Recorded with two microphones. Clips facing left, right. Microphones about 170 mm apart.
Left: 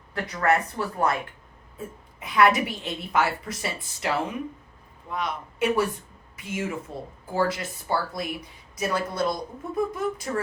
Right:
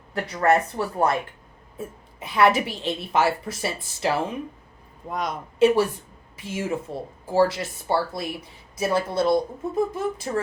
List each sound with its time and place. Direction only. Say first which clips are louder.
0.1 s speech: right 3 dB; 25° right (ahead or behind)
2.1 s speech: right 1 dB; 25° right (ahead or behind)
5.0 s a man's voice: right 2 dB; 40° right (ahead or behind)
5.5 s a woman's voice: right 6 dB; 30° right (ahead or behind)